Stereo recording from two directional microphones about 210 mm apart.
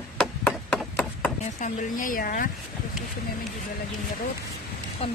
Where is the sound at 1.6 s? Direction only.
40° left (ahead or behind).